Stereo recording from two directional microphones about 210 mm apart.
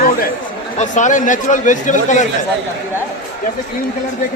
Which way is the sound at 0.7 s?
35° left (ahead or behind).